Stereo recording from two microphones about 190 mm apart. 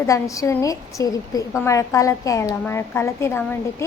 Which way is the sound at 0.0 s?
15° left (ahead or behind).